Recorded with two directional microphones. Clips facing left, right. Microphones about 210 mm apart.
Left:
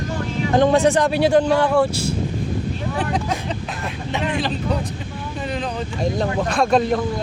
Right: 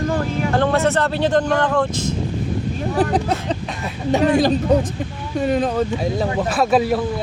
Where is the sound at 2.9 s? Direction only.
35° right (ahead or behind).